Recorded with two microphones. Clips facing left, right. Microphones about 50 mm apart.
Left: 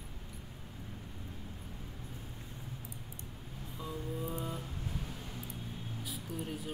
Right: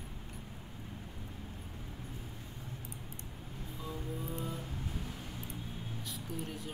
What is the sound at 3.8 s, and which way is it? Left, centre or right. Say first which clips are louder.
Music: left 2 dB; centre.